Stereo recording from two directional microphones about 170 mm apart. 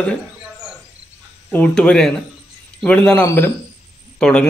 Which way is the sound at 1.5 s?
5° left (ahead or behind).